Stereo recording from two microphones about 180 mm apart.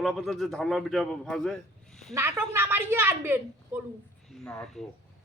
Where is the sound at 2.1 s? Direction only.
15° right (ahead or behind).